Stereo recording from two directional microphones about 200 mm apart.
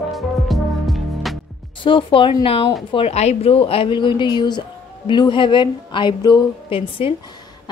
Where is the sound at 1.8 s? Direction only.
25° left (ahead or behind).